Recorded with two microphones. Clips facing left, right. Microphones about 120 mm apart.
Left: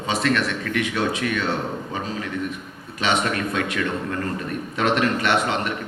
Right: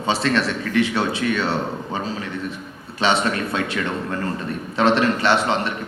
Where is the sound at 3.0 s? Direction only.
30° right (ahead or behind).